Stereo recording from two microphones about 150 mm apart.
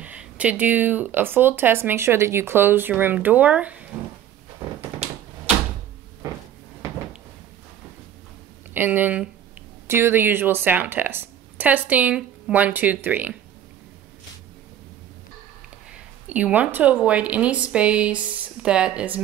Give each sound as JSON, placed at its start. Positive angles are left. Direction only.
{"t": 0.0, "sound": "speech", "side_deg": -10}
{"t": 8.7, "sound": "speech", "side_deg": -10}
{"t": 15.9, "sound": "speech", "side_deg": -10}